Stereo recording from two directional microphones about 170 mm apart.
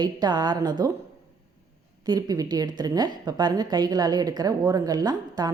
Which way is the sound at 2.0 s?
25° right (ahead or behind).